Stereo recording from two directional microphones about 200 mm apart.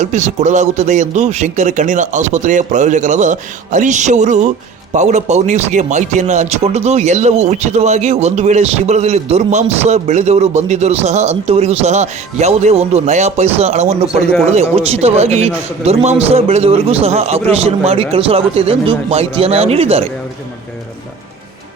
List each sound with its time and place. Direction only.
0.0 s a man's voice: 35° right (ahead or behind)